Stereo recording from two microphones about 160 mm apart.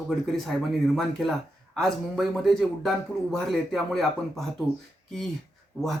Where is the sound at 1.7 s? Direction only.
Centre (ahead or behind).